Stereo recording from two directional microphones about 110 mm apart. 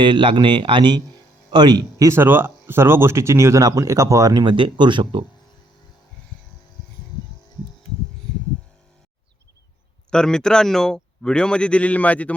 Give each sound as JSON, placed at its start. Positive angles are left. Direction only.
{"t": 0.0, "sound": "speech", "side_deg": -45}
{"t": 2.0, "sound": "speech", "side_deg": -20}
{"t": 4.4, "sound": "speech", "side_deg": -45}
{"t": 10.1, "sound": "a man's voice", "side_deg": 5}